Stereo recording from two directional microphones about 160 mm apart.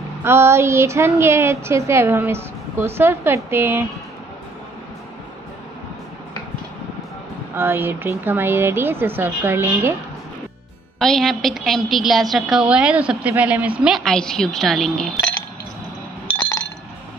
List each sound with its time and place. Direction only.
0.2 s a woman's voice: 15° right (ahead or behind)
7.5 s a woman's voice: 15° right (ahead or behind)
11.0 s a woman's voice: centre (ahead or behind)